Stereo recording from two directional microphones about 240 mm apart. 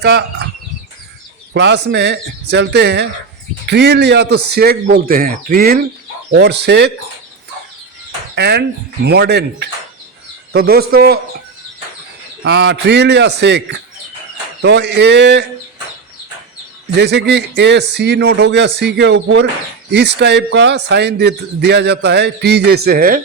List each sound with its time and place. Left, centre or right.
0.0 s speech: right
1.5 s a man's voice: right
8.4 s a man's voice: right
12.4 s speech: right
16.9 s speech: right